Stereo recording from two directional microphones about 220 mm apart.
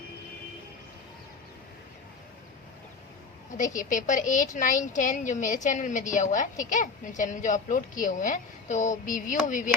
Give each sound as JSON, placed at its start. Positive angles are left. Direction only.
{"t": 3.8, "sound": "a woman's voice", "side_deg": 35}